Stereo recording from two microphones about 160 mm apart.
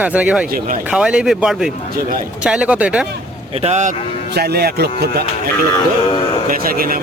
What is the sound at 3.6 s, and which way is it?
Speech, 45° right (ahead or behind).